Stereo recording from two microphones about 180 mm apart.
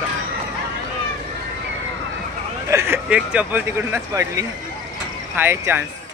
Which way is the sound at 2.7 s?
15° right (ahead or behind).